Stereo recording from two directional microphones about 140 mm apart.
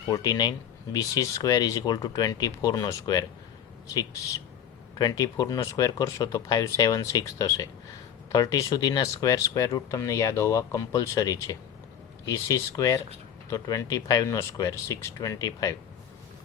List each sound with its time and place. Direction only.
0.1 s speech: 30° left (ahead or behind)
4.9 s speech: 25° left (ahead or behind)